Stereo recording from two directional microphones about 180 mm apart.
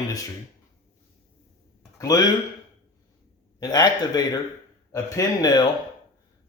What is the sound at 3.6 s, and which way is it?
Speech, 20° left (ahead or behind).